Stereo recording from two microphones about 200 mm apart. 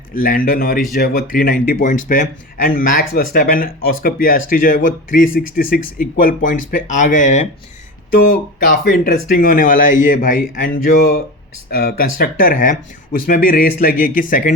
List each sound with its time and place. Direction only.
0.2 s speech: 45° left (ahead or behind)